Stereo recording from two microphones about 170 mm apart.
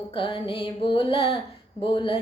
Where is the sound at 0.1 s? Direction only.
30° left (ahead or behind).